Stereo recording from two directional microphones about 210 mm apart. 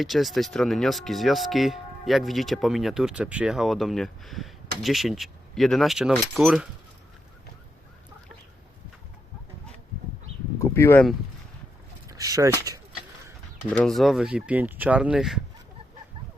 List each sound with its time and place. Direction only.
0.0 s speech: centre (ahead or behind)
10.6 s a sound: 10° left (ahead or behind)
12.0 s speech: 15° right (ahead or behind)
13.7 s speech: 5° left (ahead or behind)